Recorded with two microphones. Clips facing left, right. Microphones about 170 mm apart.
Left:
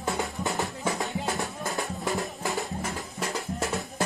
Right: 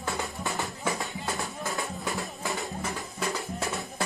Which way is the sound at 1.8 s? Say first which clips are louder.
Left 6 dB; centre (ahead or behind).